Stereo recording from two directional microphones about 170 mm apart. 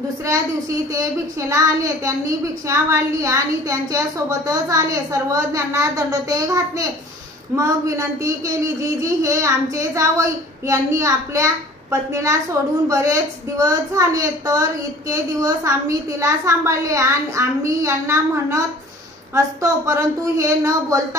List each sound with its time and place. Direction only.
1.5 s a woman's voice: 20° right (ahead or behind)